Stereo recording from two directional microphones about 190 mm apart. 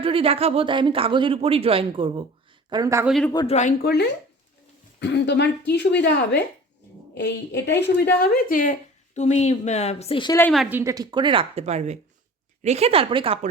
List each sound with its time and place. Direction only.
0.0 s speech: 30° right (ahead or behind)
3.3 s a woman's voice: 35° left (ahead or behind)
3.8 s a woman's voice: 60° left (ahead or behind); by 10.3 s 25° left (ahead or behind)
10.5 s a woman's voice: centre (ahead or behind)
10.8 s speech: 20° right (ahead or behind)